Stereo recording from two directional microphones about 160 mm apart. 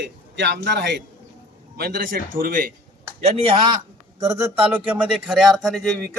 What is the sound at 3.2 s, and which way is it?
Speech, 40° right (ahead or behind).